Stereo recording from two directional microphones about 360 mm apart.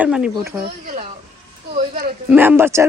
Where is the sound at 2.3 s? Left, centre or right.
Centre.